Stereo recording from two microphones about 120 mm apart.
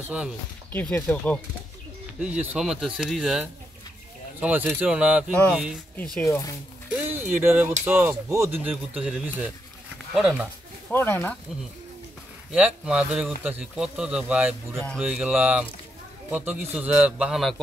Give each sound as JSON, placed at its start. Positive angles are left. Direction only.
{"t": 0.7, "sound": "speech", "side_deg": 15}
{"t": 2.1, "sound": "speech", "side_deg": -10}
{"t": 4.4, "sound": "speech", "side_deg": -15}
{"t": 6.2, "sound": "speech", "side_deg": 25}
{"t": 6.9, "sound": "a sound", "side_deg": -15}
{"t": 7.8, "sound": "speech", "side_deg": -15}
{"t": 8.6, "sound": "speech", "side_deg": -10}
{"t": 10.9, "sound": "speech", "side_deg": 15}
{"t": 12.5, "sound": "speech", "side_deg": -5}
{"t": 14.8, "sound": "speech", "side_deg": 5}
{"t": 15.0, "sound": "speech", "side_deg": -10}